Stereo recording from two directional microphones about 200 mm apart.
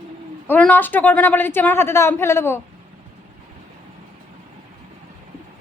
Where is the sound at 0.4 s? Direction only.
10° left (ahead or behind).